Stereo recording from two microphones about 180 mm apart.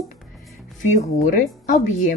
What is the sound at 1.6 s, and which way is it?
Speech, 45° left (ahead or behind).